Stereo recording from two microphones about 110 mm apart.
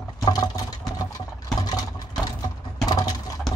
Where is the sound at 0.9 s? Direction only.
35° left (ahead or behind).